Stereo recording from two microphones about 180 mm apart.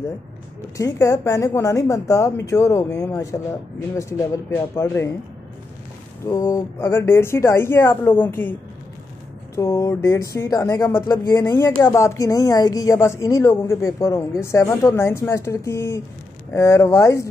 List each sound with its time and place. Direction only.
0.7 s a woman's voice: 15° left (ahead or behind)
6.2 s a woman's voice: 20° left (ahead or behind)
9.6 s a woman's voice: 15° left (ahead or behind)